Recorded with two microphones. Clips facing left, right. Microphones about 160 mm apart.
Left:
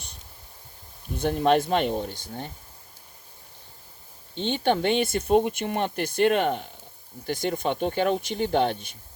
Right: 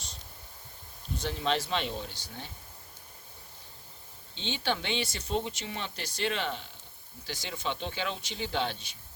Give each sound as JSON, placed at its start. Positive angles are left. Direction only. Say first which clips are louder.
{"t": 1.1, "sound": "speech", "louder": "left 9 dB", "side_deg": 55}
{"t": 4.4, "sound": "speech", "louder": "left 9 dB", "side_deg": 50}